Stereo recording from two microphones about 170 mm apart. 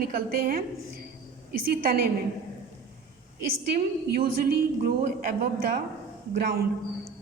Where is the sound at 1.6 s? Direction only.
60° right (ahead or behind).